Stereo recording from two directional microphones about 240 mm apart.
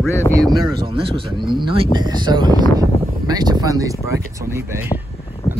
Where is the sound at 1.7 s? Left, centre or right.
Centre.